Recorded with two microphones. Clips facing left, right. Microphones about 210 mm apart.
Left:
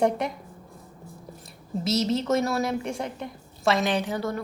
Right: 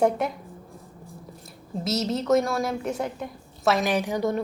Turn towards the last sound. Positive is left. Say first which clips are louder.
# right 3 dB
turn(degrees=-20)  # may be behind; listen again after turning